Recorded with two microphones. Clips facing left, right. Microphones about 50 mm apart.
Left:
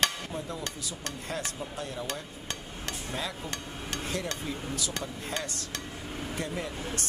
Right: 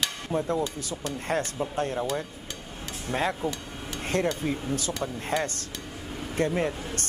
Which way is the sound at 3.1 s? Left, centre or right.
Right.